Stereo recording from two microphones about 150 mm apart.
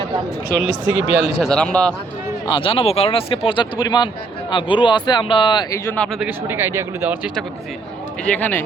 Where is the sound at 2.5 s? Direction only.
35° left (ahead or behind).